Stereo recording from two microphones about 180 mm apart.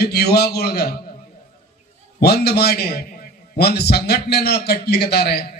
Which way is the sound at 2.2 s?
60° left (ahead or behind).